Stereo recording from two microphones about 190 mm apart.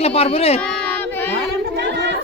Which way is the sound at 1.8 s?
65° right (ahead or behind).